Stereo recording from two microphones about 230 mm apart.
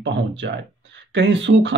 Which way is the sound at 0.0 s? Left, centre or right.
Right.